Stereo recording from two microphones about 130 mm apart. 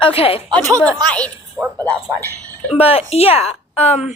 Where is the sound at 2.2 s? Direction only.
15° left (ahead or behind).